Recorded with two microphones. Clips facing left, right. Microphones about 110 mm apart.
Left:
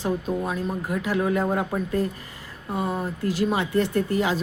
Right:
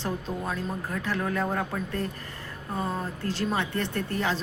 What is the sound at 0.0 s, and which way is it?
Speech, 10° left (ahead or behind).